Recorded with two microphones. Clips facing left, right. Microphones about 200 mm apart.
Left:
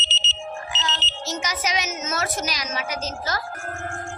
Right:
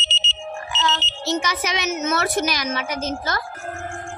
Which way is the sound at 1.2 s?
60° right (ahead or behind).